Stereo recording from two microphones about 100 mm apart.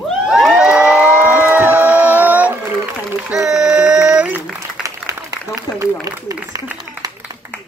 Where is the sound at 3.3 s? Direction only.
5° right (ahead or behind).